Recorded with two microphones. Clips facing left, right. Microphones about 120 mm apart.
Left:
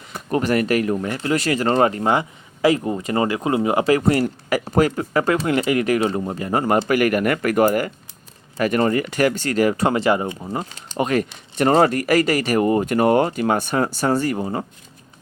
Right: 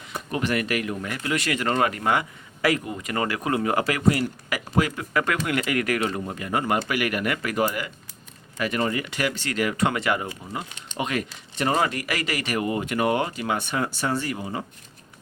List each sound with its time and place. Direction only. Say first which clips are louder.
0.3 s speech: left 7 dB; 40° left (ahead or behind); by 3.9 s 20° left (ahead or behind)
4.1 s speech: left 7 dB; 40° left (ahead or behind)